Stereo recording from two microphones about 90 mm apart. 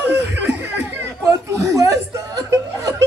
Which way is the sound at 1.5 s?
40° right (ahead or behind).